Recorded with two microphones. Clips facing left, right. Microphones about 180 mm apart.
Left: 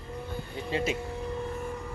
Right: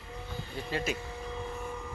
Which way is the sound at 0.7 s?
25° left (ahead or behind).